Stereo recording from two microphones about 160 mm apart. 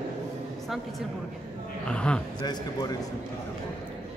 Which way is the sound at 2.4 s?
25° left (ahead or behind).